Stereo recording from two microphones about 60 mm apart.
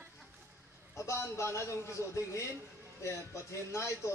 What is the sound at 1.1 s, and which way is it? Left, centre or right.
Speech, left.